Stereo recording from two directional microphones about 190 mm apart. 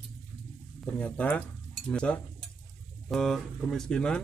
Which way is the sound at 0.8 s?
5° left (ahead or behind).